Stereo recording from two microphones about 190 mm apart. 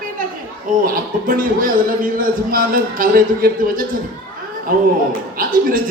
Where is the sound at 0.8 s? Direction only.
45° right (ahead or behind).